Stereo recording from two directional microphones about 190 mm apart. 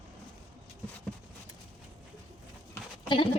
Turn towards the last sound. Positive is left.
turn(degrees=25)  # may be behind; listen again after turning